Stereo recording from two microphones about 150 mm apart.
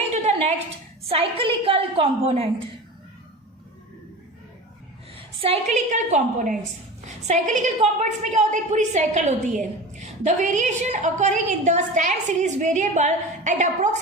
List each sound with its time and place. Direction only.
0.1 s a sound: 45° right (ahead or behind)
1.0 s a woman's voice: 40° right (ahead or behind)
5.1 s a woman's voice: 40° right (ahead or behind)